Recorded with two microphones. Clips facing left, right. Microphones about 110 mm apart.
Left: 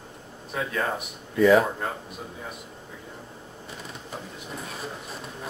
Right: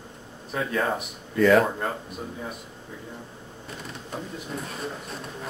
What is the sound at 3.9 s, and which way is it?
Bird, centre (ahead or behind).